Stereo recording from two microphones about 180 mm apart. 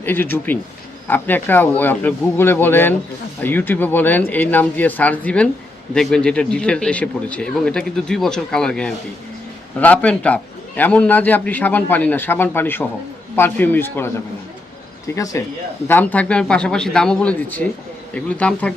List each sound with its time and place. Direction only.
0.0 s a man's voice: 10° left (ahead or behind)